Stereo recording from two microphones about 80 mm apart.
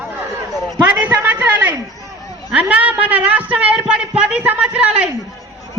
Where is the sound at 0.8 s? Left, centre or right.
Centre.